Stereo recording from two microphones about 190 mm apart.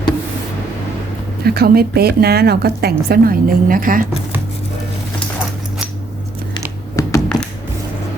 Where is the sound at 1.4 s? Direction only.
55° right (ahead or behind).